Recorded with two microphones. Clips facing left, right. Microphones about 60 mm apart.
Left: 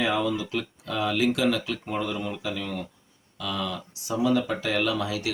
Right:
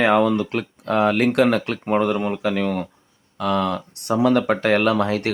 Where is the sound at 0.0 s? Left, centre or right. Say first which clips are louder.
Right 9 dB; right.